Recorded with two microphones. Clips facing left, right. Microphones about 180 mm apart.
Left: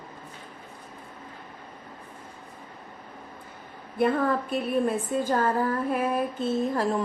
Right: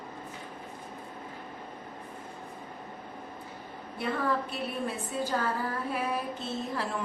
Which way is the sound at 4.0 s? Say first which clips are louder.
Left 7 dB; 50° left (ahead or behind).